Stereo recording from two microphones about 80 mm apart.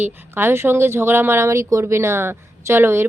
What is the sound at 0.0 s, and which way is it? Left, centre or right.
Speech, right.